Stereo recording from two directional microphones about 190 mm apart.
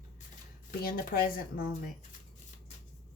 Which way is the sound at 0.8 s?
50° left (ahead or behind).